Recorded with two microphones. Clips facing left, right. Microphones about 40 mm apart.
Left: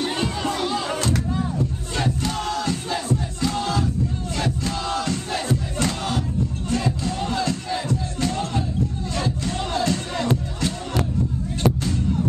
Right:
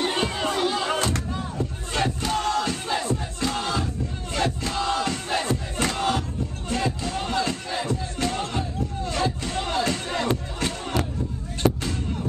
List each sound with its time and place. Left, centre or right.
0.0 s crowd: centre
2.9 s battle cry: centre
4.4 s crowd: centre
6.7 s music: centre